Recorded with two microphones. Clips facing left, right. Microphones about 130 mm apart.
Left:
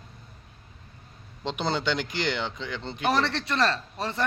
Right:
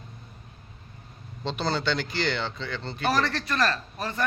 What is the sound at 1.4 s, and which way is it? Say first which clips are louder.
Speech: even; 15° left (ahead or behind).